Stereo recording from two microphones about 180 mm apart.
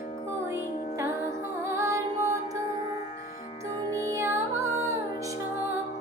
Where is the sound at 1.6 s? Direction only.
15° right (ahead or behind).